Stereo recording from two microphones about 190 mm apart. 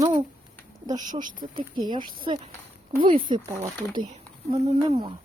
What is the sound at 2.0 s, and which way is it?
Speech, 50° right (ahead or behind).